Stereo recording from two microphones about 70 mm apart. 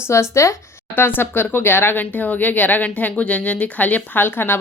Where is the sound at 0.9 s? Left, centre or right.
Left.